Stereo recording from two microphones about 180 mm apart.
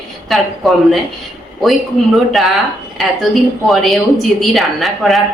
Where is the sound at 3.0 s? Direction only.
Centre (ahead or behind).